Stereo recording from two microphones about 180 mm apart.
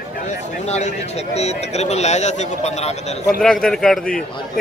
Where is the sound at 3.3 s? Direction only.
5° left (ahead or behind).